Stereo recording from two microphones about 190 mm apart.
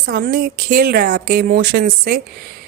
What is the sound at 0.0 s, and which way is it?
A woman's voice, 50° right (ahead or behind).